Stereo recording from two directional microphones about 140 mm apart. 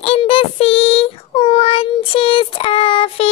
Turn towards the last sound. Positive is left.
turn(degrees=40)  # may be behind; listen again after turning